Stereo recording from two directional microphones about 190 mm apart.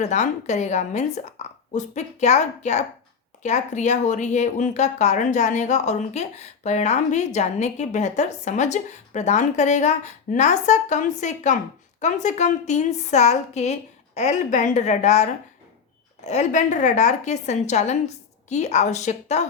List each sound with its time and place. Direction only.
0.0 s speech: 35° left (ahead or behind)